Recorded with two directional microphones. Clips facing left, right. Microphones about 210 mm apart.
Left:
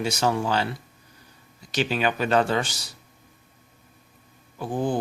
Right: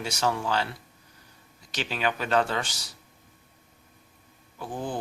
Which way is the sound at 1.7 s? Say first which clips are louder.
Left 5 dB; 10° left (ahead or behind).